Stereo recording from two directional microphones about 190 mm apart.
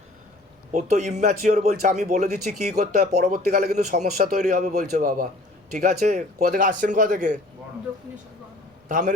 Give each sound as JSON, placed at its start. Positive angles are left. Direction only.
{"t": 0.7, "sound": "a man's voice", "side_deg": -35}
{"t": 8.9, "sound": "a man's voice", "side_deg": -45}